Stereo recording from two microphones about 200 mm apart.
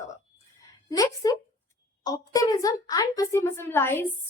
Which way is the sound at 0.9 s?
20° left (ahead or behind).